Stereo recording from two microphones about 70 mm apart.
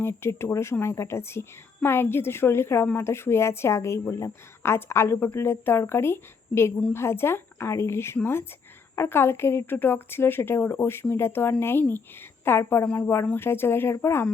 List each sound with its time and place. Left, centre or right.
0.0 s a woman's voice: left
12.8 s a woman's voice: left